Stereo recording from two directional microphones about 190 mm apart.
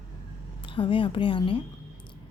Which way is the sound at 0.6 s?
25° left (ahead or behind).